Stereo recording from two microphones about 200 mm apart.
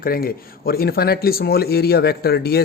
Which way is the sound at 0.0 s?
50° left (ahead or behind).